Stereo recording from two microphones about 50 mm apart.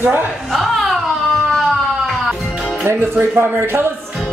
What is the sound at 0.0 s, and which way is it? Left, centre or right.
Speech, right.